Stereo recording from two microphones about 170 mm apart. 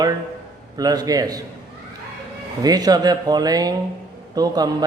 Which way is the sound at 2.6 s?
20° right (ahead or behind).